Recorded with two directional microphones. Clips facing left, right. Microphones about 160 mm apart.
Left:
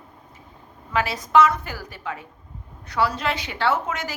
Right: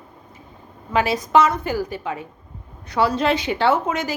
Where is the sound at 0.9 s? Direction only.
20° right (ahead or behind).